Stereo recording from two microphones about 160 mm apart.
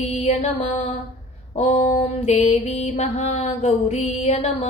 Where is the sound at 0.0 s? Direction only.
40° left (ahead or behind).